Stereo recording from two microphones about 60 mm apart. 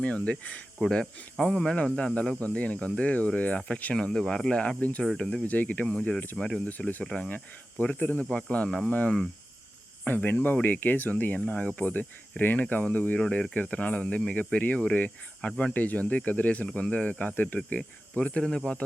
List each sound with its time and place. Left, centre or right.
0.0 s speech: centre
3.9 s speech: centre
4.8 s speech: left
5.1 s speech: centre
5.4 s speech: left
10.2 s speech: left
15.4 s speech: centre
15.7 s speech: left
18.3 s speech: centre